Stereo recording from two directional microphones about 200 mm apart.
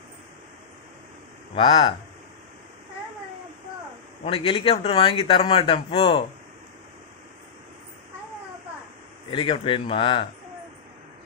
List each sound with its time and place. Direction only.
1.5 s speech: 25° left (ahead or behind)
4.2 s speech: 25° left (ahead or behind)
9.3 s speech: 25° left (ahead or behind)